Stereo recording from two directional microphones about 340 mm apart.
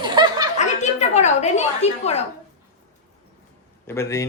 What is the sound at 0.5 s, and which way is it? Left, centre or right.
A woman's voice, centre.